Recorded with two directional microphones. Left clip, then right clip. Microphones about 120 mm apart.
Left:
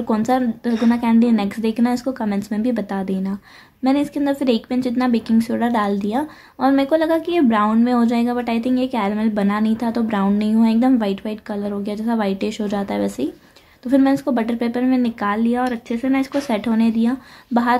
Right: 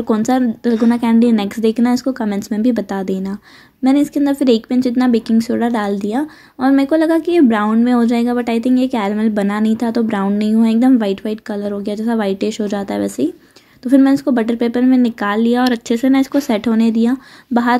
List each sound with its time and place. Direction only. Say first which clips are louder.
0.0 s speech: right 3 dB; 35° right (ahead or behind)
15.9 s speech: right 6 dB; 60° right (ahead or behind); by 17.7 s 40° right (ahead or behind)